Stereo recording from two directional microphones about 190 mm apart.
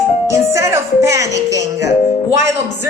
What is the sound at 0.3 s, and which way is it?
Music, 15° right (ahead or behind).